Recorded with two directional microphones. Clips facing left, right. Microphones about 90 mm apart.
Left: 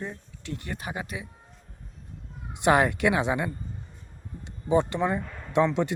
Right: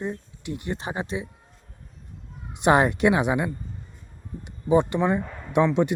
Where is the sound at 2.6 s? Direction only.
20° right (ahead or behind).